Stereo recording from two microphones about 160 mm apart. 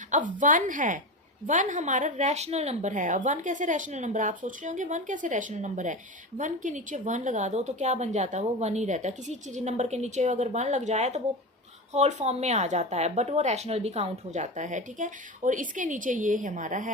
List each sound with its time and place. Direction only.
0.1 s a woman's voice: 55° right (ahead or behind)